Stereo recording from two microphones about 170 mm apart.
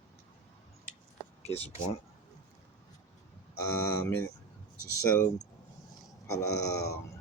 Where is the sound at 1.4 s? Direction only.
40° left (ahead or behind).